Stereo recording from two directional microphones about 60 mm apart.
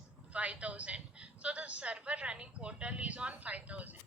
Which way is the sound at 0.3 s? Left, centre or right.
Right.